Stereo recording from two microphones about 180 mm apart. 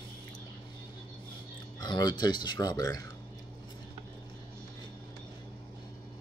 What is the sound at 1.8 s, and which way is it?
Speech, 25° left (ahead or behind).